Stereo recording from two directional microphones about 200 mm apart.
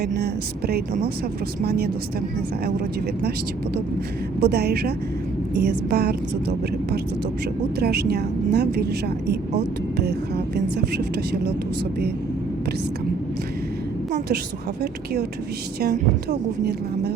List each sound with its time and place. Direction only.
1.6 s speech: 50° right (ahead or behind)
4.4 s speech: 55° right (ahead or behind)
7.8 s speech: 55° right (ahead or behind)